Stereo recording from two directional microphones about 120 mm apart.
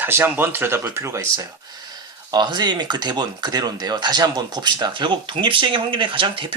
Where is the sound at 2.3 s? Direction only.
35° right (ahead or behind).